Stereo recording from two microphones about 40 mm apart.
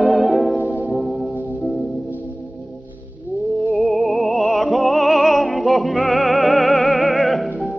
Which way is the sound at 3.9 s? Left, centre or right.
Centre.